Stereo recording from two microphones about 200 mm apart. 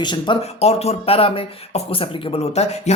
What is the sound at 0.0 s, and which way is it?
Speech, 25° left (ahead or behind).